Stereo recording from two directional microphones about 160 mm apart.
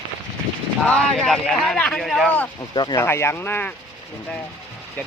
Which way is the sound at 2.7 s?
25° left (ahead or behind).